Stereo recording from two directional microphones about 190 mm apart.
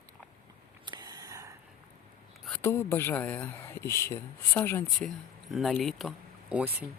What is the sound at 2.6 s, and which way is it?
Speech, 15° left (ahead or behind).